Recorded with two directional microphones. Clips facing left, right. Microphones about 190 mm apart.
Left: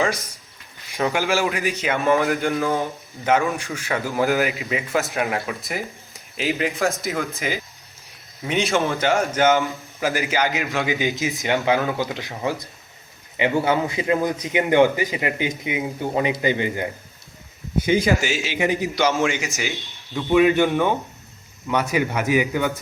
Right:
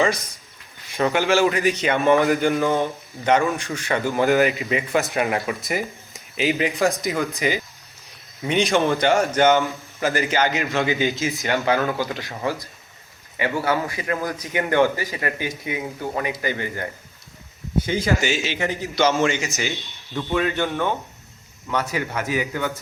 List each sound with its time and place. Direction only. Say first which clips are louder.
1.0 s a man's voice: right 3 dB; centre (ahead or behind)
10.8 s a man's voice: right 1 dB; 15° left (ahead or behind)